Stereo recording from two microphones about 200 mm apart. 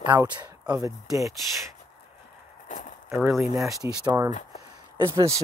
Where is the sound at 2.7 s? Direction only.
40° left (ahead or behind).